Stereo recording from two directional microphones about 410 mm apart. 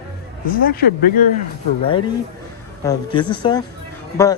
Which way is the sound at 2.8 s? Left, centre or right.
Centre.